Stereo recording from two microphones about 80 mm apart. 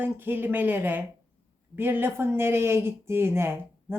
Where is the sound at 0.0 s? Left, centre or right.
Right.